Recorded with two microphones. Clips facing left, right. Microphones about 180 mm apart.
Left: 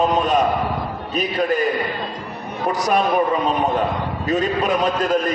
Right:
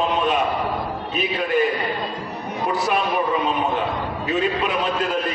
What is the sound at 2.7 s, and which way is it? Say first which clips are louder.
A man's voice: left 4 dB; 40° left (ahead or behind).